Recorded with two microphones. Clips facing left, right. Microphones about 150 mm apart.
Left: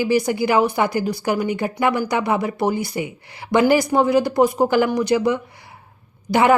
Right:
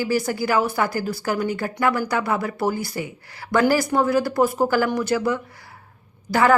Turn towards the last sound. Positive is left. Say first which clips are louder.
# left 2 dB
turn(degrees=20)  # may be behind; listen again after turning